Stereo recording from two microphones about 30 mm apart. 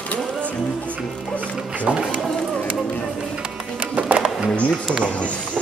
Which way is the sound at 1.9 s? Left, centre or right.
Right.